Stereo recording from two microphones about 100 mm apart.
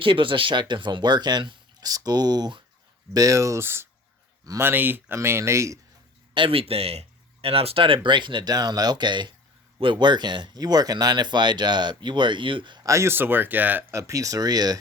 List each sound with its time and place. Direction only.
0.0 s speech: 60° right (ahead or behind)
3.1 s speech: 35° right (ahead or behind)
6.3 s speech: 65° right (ahead or behind); by 7.0 s 90° right
7.4 s speech: 75° right (ahead or behind); by 12.8 s 55° right (ahead or behind)
12.8 s speech: 30° right (ahead or behind)
13.9 s speech: 35° right (ahead or behind)